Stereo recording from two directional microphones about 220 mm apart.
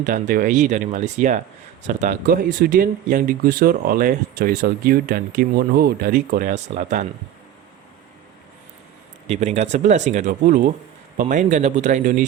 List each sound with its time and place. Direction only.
0.0 s speech: 40° right (ahead or behind)
9.2 s speech: 30° right (ahead or behind)